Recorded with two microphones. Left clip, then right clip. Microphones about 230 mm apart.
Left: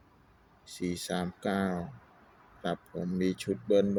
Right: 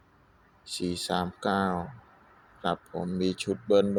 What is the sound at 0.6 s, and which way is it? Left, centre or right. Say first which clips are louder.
Speech: right 4 dB; centre.